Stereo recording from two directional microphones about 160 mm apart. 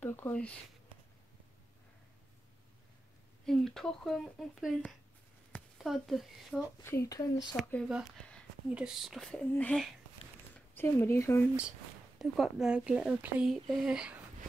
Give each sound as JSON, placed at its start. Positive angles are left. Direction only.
{"t": 0.0, "sound": "a sound", "side_deg": 15}
{"t": 3.4, "sound": "speech", "side_deg": 0}
{"t": 6.8, "sound": "speech", "side_deg": 20}
{"t": 7.5, "sound": "speech", "side_deg": 0}
{"t": 12.2, "sound": "speech", "side_deg": 0}